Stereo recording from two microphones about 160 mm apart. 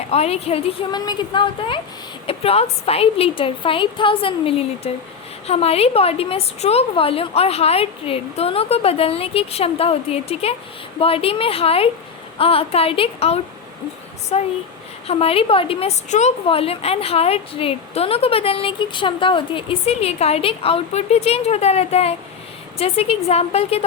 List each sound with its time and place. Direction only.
0.1 s a woman's voice: 40° left (ahead or behind)